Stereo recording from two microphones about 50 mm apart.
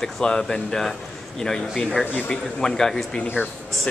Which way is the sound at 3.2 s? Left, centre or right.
Left.